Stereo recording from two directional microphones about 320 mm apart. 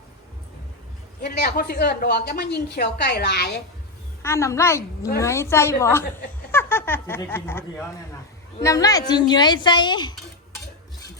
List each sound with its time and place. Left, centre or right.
1.2 s a woman's voice: left
4.2 s a woman's voice: centre